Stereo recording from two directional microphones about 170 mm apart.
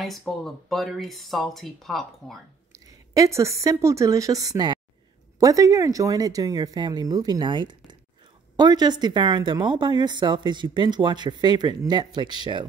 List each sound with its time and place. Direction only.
0.0 s speech: centre (ahead or behind)
2.7 s speech: 20° right (ahead or behind)